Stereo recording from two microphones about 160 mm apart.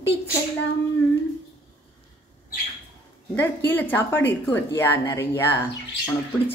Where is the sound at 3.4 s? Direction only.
10° left (ahead or behind).